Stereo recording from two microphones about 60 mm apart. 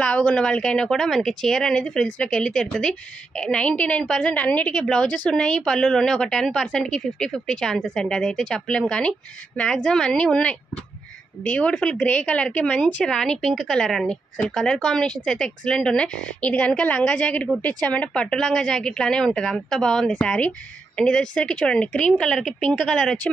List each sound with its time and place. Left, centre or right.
0.0 s a woman's voice: left
3.6 s a woman's voice: left
12.0 s a woman's voice: left
13.0 s a woman's voice: centre
16.3 s a woman's voice: left